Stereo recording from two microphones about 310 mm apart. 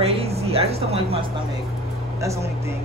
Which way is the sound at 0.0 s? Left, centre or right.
Centre.